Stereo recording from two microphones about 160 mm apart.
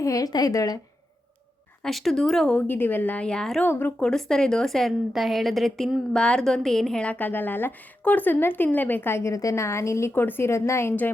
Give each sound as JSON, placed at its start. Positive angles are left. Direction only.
{"t": 0.0, "sound": "a woman's voice", "side_deg": 20}
{"t": 1.8, "sound": "speech", "side_deg": 0}